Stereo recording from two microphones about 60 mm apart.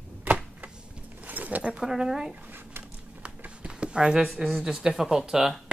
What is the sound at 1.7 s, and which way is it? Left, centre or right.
Speech, centre.